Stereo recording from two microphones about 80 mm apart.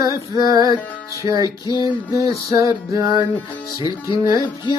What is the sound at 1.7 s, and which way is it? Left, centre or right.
Music, left.